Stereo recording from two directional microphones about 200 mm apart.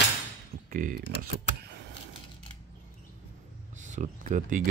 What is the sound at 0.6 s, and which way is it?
Typing, 45° right (ahead or behind).